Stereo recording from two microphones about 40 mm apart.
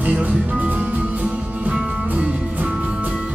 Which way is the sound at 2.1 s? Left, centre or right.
Right.